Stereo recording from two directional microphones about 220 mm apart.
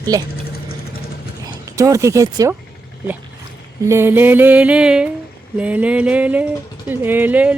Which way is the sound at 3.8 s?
10° right (ahead or behind).